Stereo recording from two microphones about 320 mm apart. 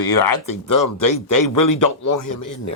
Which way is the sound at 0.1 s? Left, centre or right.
Left.